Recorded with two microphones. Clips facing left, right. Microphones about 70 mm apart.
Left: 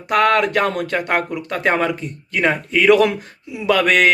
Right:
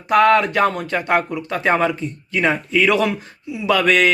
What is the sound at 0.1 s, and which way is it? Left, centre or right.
Speech, left.